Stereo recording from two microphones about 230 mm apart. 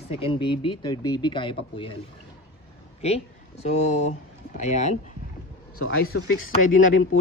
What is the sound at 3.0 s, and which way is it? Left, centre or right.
Speech, left.